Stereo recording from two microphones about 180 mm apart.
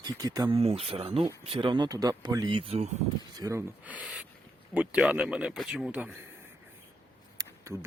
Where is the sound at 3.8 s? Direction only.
5° right (ahead or behind).